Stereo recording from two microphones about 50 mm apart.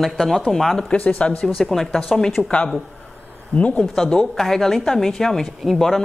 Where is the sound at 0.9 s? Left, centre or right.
Left.